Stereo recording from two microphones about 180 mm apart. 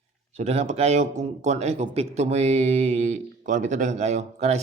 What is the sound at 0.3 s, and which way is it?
Speech, 35° right (ahead or behind).